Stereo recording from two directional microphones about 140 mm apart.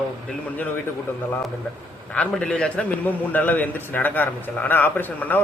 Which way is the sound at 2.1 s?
5° left (ahead or behind).